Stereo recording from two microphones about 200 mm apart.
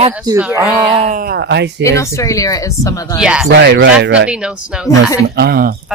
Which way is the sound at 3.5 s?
60° right (ahead or behind).